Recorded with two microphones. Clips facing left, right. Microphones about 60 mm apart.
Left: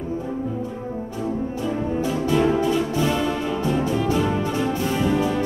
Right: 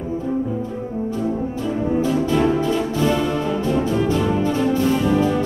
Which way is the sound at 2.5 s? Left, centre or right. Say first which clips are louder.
Right 1 dB; centre.